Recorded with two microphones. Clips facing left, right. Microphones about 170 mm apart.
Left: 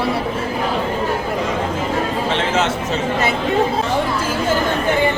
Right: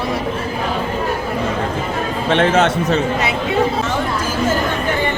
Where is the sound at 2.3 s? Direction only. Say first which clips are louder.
Right 8 dB; 60° right (ahead or behind).